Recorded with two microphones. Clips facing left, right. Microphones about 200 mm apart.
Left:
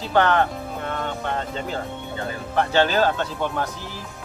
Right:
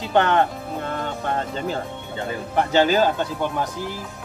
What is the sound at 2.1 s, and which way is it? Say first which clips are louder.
Speech: right 1 dB; 15° right (ahead or behind).